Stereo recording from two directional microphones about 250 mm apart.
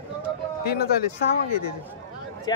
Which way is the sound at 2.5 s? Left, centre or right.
Centre.